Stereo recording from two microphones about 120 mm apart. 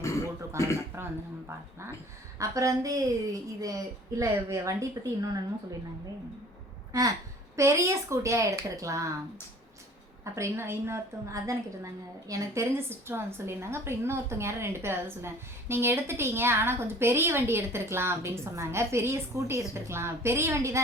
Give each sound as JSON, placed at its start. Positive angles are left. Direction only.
{"t": 0.6, "sound": "a woman's voice", "side_deg": -25}
{"t": 2.4, "sound": "a woman's voice", "side_deg": -25}
{"t": 7.5, "sound": "a woman's voice", "side_deg": -25}
{"t": 10.3, "sound": "a woman's voice", "side_deg": -20}